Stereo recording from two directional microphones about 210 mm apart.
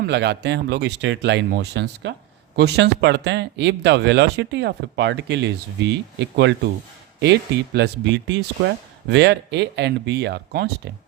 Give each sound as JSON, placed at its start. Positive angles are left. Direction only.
{"t": 0.0, "sound": "speech", "side_deg": -55}